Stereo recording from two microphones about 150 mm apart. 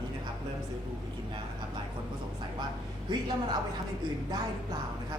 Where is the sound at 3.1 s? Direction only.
30° right (ahead or behind).